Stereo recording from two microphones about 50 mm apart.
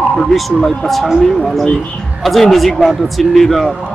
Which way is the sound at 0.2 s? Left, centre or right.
Centre.